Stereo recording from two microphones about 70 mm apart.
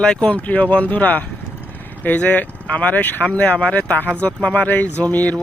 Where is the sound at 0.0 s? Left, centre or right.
Centre.